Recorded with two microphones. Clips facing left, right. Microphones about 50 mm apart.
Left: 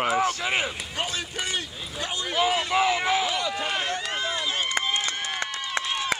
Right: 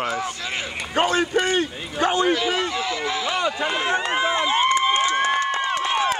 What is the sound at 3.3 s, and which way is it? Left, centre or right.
Speech, right.